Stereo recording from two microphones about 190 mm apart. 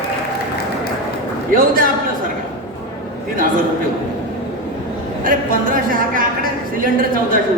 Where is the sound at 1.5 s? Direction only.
45° right (ahead or behind).